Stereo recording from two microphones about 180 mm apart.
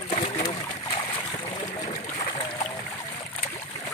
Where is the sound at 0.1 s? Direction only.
30° left (ahead or behind).